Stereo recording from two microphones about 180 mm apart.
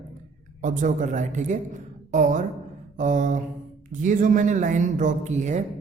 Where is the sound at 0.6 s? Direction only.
45° right (ahead or behind).